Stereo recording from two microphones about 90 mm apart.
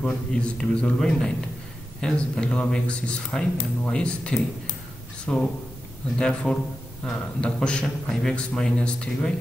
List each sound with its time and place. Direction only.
0.0 s a man's voice: 10° left (ahead or behind)